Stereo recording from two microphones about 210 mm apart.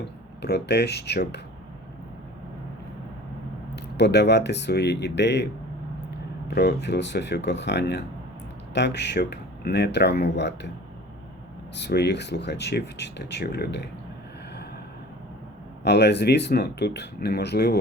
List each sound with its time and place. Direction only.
0.0 s speech: 50° left (ahead or behind)
3.8 s speech: 55° left (ahead or behind)
11.8 s speech: 55° left (ahead or behind)
15.8 s speech: 55° left (ahead or behind)